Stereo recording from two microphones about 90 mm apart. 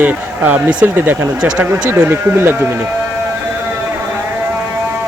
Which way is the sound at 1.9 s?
20° right (ahead or behind).